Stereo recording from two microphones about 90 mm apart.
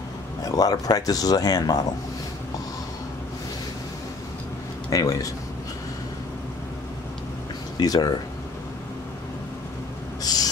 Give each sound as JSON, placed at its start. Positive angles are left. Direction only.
{"t": 0.5, "sound": "speech", "side_deg": 45}
{"t": 4.8, "sound": "speech", "side_deg": 40}
{"t": 7.8, "sound": "speech", "side_deg": 45}
{"t": 10.2, "sound": "a sound", "side_deg": 45}